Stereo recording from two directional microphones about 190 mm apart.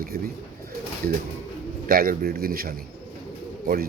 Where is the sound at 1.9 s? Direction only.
50° right (ahead or behind).